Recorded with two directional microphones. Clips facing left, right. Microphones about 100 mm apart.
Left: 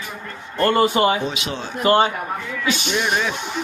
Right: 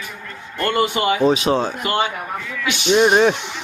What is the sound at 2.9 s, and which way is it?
Speech, 45° right (ahead or behind).